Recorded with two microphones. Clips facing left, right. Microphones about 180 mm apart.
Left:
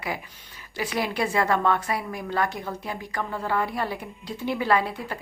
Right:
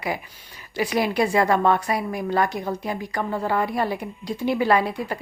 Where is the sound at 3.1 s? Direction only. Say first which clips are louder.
Right 3 dB; 35° right (ahead or behind).